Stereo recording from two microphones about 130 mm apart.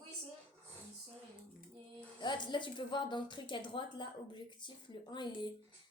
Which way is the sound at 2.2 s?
35° left (ahead or behind).